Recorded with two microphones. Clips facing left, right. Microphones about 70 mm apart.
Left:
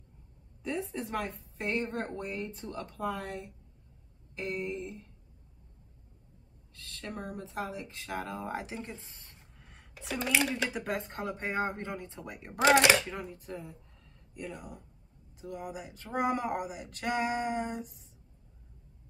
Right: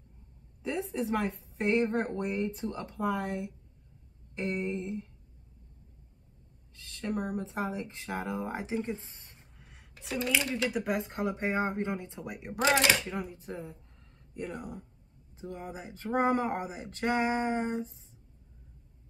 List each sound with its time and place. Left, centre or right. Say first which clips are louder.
0.6 s a sound: right 3 dB; centre
1.7 s speech: right 6 dB; centre
7.2 s speech: right 3 dB; centre
9.7 s a sound: even; centre
10.7 s speech: right 3 dB; centre
13.4 s speech: right 2 dB; right